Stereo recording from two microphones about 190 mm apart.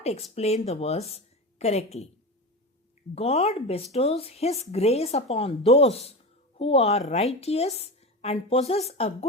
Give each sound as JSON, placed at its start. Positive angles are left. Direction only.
{"t": 0.0, "sound": "speech", "side_deg": 35}
{"t": 3.2, "sound": "speech", "side_deg": 35}